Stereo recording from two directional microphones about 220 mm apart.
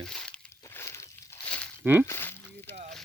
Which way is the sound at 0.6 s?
10° left (ahead or behind).